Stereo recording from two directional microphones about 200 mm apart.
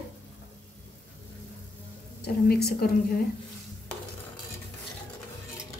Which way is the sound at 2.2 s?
50° left (ahead or behind).